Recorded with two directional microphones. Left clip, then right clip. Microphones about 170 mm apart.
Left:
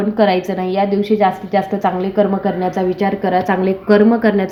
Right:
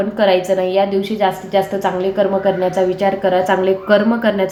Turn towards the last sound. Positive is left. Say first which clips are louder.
# left 2 dB
turn(degrees=45)  # may be behind; listen again after turning